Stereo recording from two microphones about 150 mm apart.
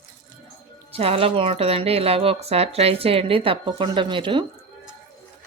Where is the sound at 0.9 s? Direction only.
40° right (ahead or behind).